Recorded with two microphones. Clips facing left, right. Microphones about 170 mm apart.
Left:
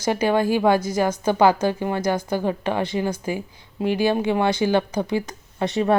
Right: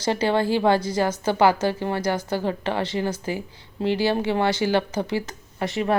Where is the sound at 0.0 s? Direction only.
15° left (ahead or behind).